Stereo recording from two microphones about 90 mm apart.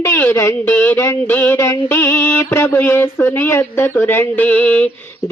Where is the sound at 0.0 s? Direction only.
30° left (ahead or behind).